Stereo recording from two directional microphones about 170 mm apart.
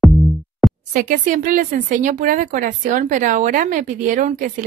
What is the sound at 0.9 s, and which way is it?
Speech, 55° right (ahead or behind).